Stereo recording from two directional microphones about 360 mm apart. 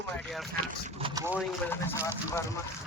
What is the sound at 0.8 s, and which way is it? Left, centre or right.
Vehicle, centre.